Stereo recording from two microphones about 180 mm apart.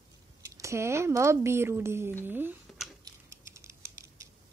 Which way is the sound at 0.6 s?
15° right (ahead or behind).